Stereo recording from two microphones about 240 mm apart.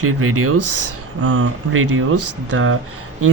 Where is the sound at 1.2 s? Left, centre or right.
Right.